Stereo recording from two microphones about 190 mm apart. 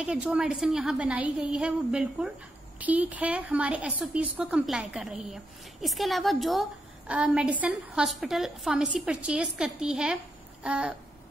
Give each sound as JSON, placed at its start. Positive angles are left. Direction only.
{"t": 0.0, "sound": "a woman's voice", "side_deg": -5}